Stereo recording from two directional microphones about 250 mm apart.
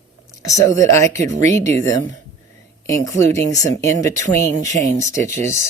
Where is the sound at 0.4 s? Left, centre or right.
Centre.